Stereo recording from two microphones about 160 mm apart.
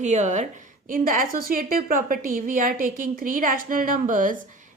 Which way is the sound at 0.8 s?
60° right (ahead or behind).